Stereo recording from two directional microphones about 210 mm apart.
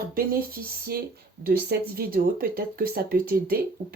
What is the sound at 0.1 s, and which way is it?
Speech, 45° right (ahead or behind).